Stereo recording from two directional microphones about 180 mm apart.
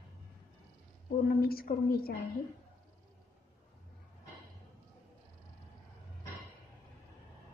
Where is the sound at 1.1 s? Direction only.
55° left (ahead or behind).